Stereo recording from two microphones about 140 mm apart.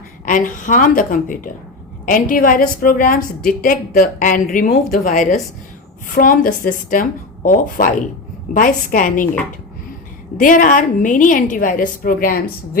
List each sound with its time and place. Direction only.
0.3 s a woman's voice: 70° left (ahead or behind)
4.7 s speech: 65° left (ahead or behind)
6.1 s a woman's voice: 85° left
10.3 s a woman's voice: 70° left (ahead or behind); by 12.8 s 85° left